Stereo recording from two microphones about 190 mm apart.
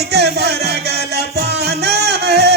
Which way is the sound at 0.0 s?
60° right (ahead or behind).